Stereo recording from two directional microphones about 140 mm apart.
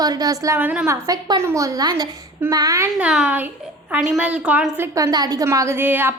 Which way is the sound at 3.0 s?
5° right (ahead or behind).